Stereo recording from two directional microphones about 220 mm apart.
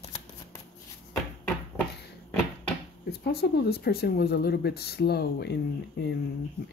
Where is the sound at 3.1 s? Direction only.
45° left (ahead or behind).